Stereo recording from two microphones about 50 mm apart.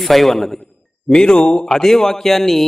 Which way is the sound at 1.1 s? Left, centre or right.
Centre.